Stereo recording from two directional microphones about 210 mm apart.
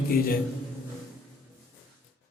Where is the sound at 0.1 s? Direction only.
45° left (ahead or behind).